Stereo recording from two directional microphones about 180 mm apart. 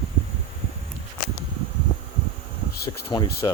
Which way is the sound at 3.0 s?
25° left (ahead or behind).